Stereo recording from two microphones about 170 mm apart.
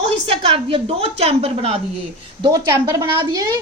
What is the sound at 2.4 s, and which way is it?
A woman's voice, 20° right (ahead or behind).